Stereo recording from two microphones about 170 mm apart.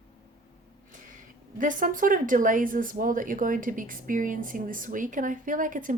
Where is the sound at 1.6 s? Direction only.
50° right (ahead or behind).